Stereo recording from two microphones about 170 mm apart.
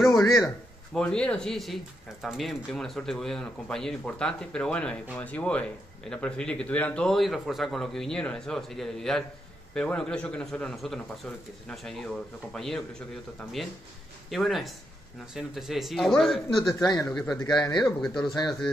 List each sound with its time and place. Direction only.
0.9 s speech: 5° left (ahead or behind)
16.8 s speech: 20° left (ahead or behind)
17.6 s speech: 10° left (ahead or behind)